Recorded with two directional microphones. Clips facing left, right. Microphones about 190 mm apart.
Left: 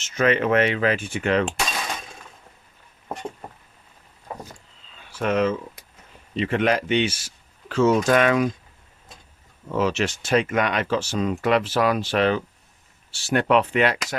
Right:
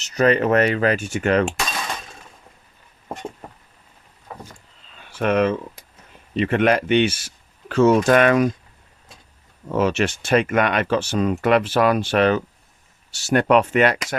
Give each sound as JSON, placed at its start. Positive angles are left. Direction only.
{"t": 0.0, "sound": "speech", "side_deg": -40}
{"t": 5.2, "sound": "speech", "side_deg": -60}
{"t": 9.7, "sound": "speech", "side_deg": -55}